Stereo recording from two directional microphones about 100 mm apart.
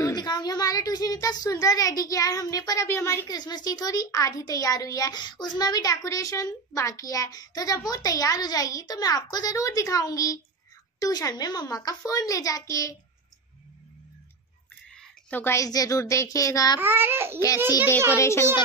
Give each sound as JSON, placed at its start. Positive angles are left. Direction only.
{"t": 0.0, "sound": "a woman's voice", "side_deg": 45}
{"t": 2.9, "sound": "speech", "side_deg": 25}
{"t": 3.3, "sound": "a child's voice", "side_deg": 45}
{"t": 15.2, "sound": "a woman's voice", "side_deg": 20}
{"t": 15.5, "sound": "a child's voice", "side_deg": 35}
{"t": 16.8, "sound": "a child's voice", "side_deg": -20}
{"t": 18.1, "sound": "speech", "side_deg": 30}